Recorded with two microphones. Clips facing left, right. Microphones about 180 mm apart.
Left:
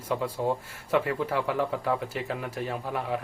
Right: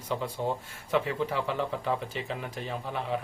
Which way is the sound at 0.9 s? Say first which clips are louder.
Left 2 dB; 5° left (ahead or behind).